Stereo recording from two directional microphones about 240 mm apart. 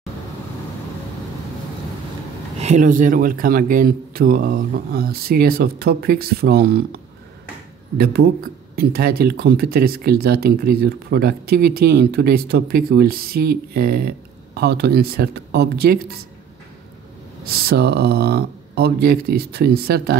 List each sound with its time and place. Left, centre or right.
2.6 s speech: right
8.0 s speech: right
17.6 s speech: right